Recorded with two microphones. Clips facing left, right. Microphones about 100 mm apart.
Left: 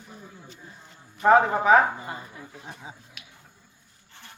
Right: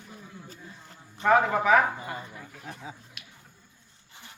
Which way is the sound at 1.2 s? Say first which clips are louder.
Left 3 dB; 30° left (ahead or behind).